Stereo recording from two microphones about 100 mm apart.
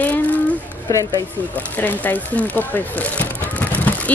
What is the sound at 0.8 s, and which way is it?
Speech, 35° left (ahead or behind).